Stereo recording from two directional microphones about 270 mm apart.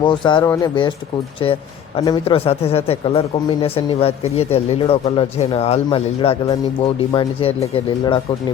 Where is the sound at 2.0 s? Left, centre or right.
Left.